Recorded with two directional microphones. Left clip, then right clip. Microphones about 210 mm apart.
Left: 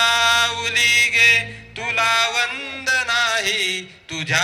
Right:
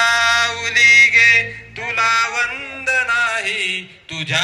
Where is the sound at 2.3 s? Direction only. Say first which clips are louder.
Right 1 dB; 50° left (ahead or behind).